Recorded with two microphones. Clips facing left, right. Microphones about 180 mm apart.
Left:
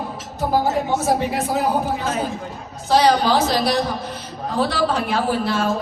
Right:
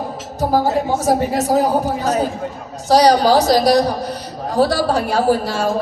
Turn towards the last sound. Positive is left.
turn(degrees=-40)  # may be behind; listen again after turning